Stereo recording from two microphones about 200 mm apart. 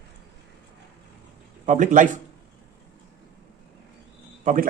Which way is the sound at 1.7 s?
40° right (ahead or behind).